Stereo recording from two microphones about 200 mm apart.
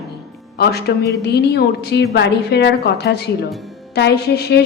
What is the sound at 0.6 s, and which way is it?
A woman's voice, 50° left (ahead or behind).